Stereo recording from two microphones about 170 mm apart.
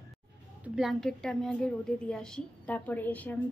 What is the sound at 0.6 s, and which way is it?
A woman's voice, centre (ahead or behind).